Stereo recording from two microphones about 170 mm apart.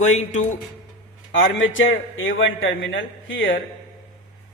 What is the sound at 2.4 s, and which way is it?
Speech, 90° left.